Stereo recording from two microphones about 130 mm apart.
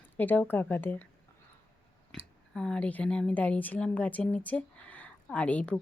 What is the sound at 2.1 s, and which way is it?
A woman's voice, 5° left (ahead or behind).